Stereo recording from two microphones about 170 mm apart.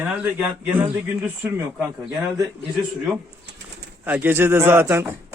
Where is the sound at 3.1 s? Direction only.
Centre (ahead or behind).